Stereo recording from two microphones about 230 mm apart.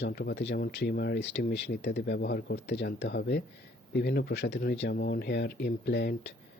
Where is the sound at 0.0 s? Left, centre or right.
Left.